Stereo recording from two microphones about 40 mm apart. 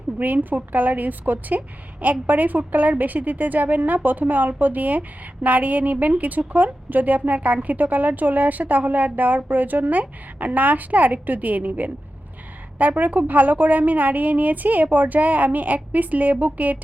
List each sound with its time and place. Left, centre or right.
0.5 s a woman's voice: right